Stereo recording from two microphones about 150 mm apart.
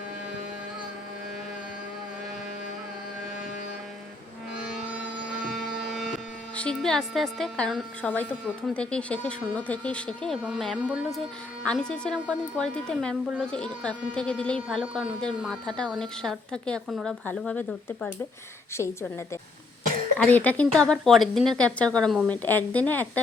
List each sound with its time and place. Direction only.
5.4 s a sound: centre (ahead or behind)
6.6 s a woman's voice: 5° left (ahead or behind)
20.1 s speech: 10° left (ahead or behind)